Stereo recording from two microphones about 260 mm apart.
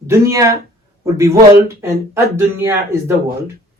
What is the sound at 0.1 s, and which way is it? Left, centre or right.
Speech, centre.